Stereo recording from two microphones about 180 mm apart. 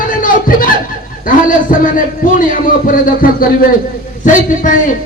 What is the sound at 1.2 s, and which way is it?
A man's voice, 50° left (ahead or behind).